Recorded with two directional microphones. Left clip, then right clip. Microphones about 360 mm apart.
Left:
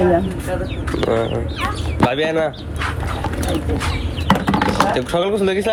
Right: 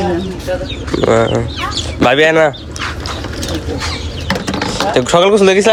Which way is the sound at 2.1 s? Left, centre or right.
Right.